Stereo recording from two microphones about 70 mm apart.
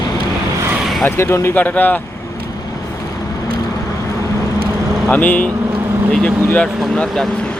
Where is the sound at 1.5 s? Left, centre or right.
Left.